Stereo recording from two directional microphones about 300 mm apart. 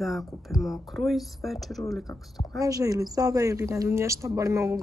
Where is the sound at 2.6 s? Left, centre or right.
Centre.